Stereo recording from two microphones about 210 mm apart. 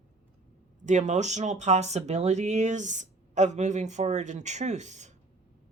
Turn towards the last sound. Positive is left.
turn(degrees=-35)  # may be behind; listen again after turning